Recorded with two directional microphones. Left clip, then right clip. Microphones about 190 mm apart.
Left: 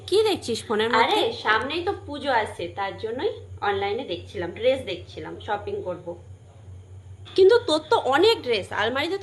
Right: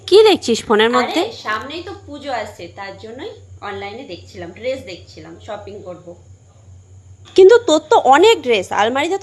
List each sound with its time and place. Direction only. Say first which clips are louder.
0.1 s a woman's voice: right 11 dB; 55° right (ahead or behind)
1.5 s a woman's voice: left 1 dB; 10° left (ahead or behind)
7.3 s a woman's voice: right 9 dB; 40° right (ahead or behind)